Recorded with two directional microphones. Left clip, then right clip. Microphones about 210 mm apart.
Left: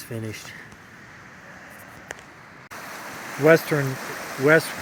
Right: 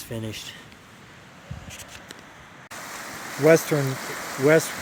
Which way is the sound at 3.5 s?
15° right (ahead or behind).